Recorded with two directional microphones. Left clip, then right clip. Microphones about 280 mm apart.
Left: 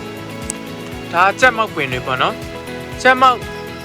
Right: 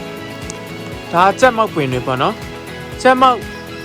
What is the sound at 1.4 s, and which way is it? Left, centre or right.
Speech, centre.